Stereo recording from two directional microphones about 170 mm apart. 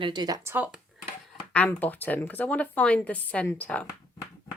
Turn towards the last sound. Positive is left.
turn(degrees=10)  # may be behind; listen again after turning